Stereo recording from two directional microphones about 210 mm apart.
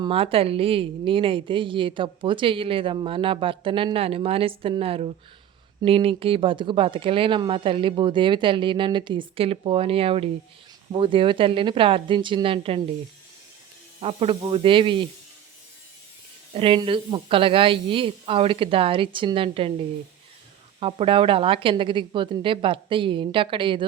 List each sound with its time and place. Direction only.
0.0 s a woman's voice: 25° right (ahead or behind)
14.0 s a woman's voice: 30° right (ahead or behind)
16.6 s a woman's voice: 25° right (ahead or behind)
20.7 s a woman's voice: 25° right (ahead or behind)